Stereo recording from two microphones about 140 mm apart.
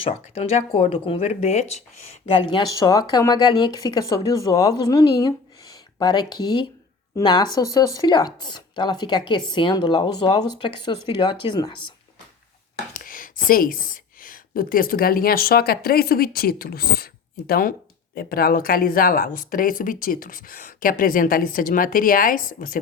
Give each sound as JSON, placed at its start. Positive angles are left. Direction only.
{"t": 0.0, "sound": "speech", "side_deg": 45}
{"t": 2.7, "sound": "speech", "side_deg": 25}
{"t": 12.9, "sound": "speech", "side_deg": 80}